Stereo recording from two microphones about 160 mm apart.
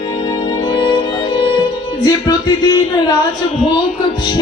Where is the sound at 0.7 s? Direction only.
30° left (ahead or behind).